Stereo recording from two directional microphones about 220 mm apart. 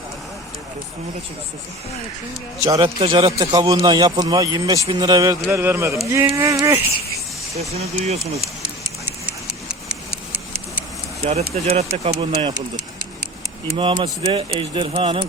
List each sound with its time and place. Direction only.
2.6 s a man's voice: 20° right (ahead or behind)
7.7 s speech: 30° right (ahead or behind)
11.5 s speech: 30° right (ahead or behind)
13.7 s speech: 20° right (ahead or behind)